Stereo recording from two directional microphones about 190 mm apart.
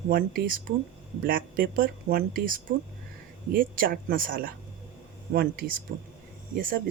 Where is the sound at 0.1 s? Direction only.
50° right (ahead or behind).